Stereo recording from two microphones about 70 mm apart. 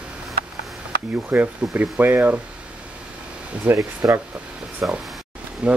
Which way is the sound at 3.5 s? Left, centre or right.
Centre.